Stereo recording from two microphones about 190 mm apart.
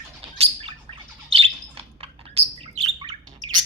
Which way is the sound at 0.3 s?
30° right (ahead or behind).